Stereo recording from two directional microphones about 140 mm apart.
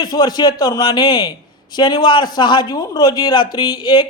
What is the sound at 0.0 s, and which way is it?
Speech, 30° left (ahead or behind).